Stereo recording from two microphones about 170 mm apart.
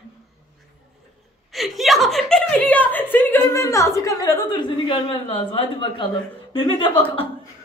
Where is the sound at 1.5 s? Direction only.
Centre (ahead or behind); by 3.9 s 20° left (ahead or behind).